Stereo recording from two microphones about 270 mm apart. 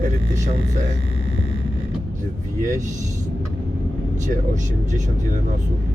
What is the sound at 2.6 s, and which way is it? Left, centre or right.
Speech, right.